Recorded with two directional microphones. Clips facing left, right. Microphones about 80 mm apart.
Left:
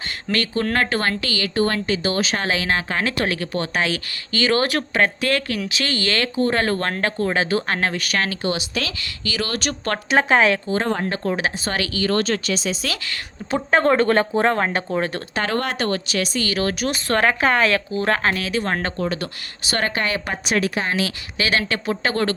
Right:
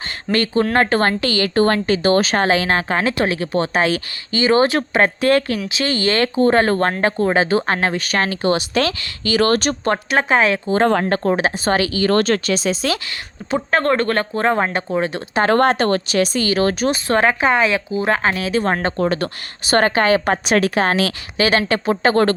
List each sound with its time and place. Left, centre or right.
0.3 s speech: right
8.5 s speech: right
10.1 s speech: centre
11.1 s speech: right
12.1 s a woman's voice: right
13.5 s speech: centre
14.7 s speech: centre
15.4 s speech: right; by 18.5 s centre
18.5 s speech: right
18.9 s a woman's voice: right
21.3 s speech: right